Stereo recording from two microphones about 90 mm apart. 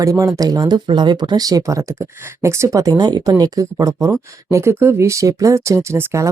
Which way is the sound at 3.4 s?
40° right (ahead or behind).